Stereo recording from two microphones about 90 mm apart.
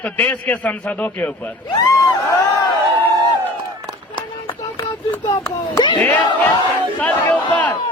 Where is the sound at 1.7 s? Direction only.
40° left (ahead or behind).